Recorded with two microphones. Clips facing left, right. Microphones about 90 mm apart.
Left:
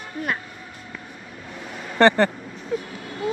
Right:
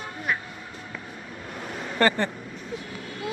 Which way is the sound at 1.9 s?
30° left (ahead or behind).